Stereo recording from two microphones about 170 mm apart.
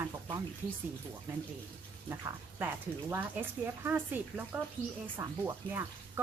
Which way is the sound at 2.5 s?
10° right (ahead or behind).